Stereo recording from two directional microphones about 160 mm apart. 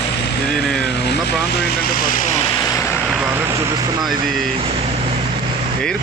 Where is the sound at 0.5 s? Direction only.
5° left (ahead or behind).